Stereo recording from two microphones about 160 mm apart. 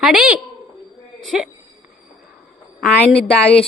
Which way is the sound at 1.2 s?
Centre (ahead or behind).